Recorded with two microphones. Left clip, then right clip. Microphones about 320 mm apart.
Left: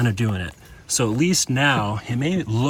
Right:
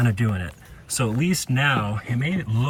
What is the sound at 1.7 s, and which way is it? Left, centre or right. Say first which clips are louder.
Speech: left 2 dB; centre.